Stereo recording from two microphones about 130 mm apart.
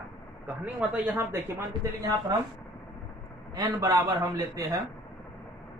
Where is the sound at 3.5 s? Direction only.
30° right (ahead or behind).